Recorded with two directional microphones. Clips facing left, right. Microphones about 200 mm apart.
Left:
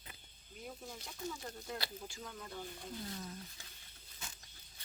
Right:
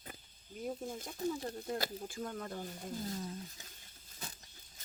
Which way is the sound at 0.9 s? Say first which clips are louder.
Right 7 dB; 50° right (ahead or behind).